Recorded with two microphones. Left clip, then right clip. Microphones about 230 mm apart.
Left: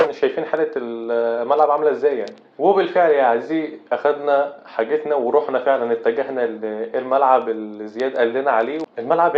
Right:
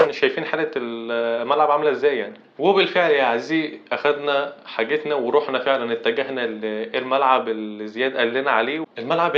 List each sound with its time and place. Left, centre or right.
0.3 s speech: right